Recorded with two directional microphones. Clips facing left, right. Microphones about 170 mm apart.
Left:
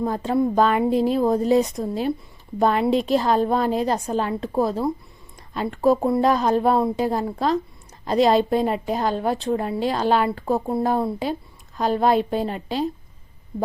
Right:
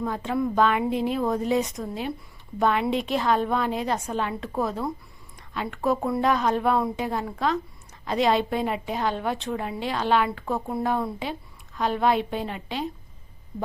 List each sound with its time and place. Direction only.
0.0 s a woman's voice: 35° left (ahead or behind)